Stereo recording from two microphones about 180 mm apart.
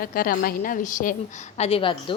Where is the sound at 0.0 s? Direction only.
50° left (ahead or behind).